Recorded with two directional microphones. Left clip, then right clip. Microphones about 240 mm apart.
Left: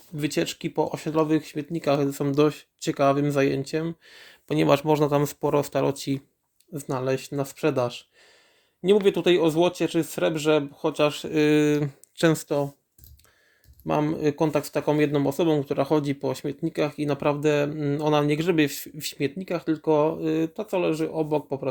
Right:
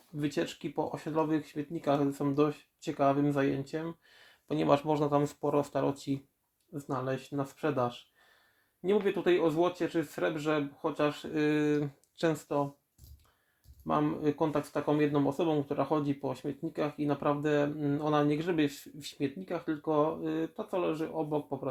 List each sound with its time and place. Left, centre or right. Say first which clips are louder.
0.2 s speech: left 7 dB; left
13.8 s speech: left 6 dB; left